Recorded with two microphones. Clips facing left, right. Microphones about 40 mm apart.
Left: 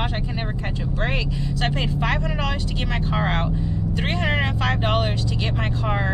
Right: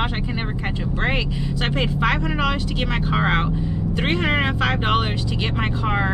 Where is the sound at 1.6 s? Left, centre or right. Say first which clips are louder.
Right 3 dB; centre.